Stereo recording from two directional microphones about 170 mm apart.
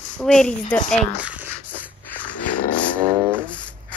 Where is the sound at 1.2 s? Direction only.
10° right (ahead or behind).